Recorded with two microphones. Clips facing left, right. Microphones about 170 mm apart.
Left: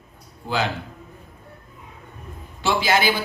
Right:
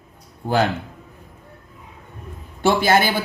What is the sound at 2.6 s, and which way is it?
Speech, 55° right (ahead or behind).